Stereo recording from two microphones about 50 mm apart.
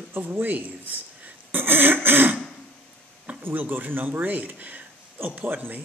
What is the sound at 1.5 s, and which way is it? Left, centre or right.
Throat clearing, right.